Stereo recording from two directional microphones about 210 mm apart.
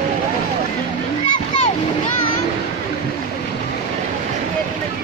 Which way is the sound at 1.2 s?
25° left (ahead or behind).